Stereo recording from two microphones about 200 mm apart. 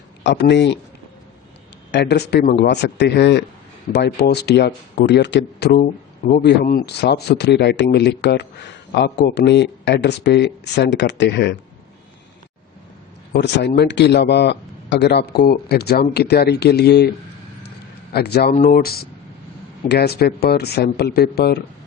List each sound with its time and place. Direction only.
0.2 s speech: 60° left (ahead or behind)
1.9 s speech: 55° left (ahead or behind)
2.6 s speech: 60° left (ahead or behind)
5.7 s speech: 40° left (ahead or behind)
6.4 s speech: 55° left (ahead or behind)
13.3 s speech: 60° left (ahead or behind)
18.1 s speech: 55° left (ahead or behind)